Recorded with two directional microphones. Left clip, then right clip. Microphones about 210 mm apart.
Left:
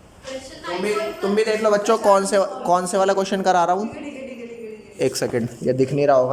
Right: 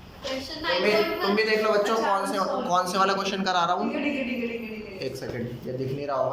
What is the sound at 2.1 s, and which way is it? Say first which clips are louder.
Speech: left 8 dB; 50° left (ahead or behind).